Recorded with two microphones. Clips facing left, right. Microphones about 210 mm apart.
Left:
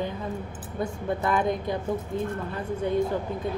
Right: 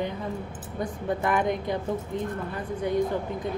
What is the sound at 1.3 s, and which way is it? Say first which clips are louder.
Speech: even; 20° right (ahead or behind).